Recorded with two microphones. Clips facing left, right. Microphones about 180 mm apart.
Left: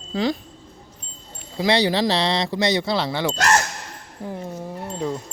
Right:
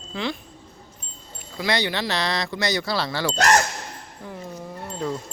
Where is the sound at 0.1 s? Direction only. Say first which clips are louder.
Left 6 dB; 40° left (ahead or behind).